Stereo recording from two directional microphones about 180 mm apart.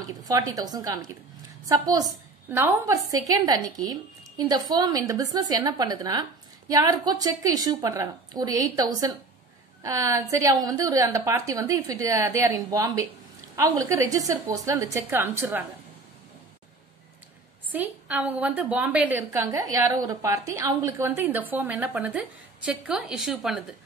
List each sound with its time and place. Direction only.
0.2 s a woman's voice: 20° right (ahead or behind)
17.6 s a woman's voice: 10° right (ahead or behind)